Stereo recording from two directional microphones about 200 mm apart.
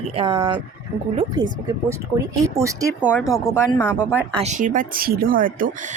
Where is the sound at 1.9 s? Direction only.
15° right (ahead or behind).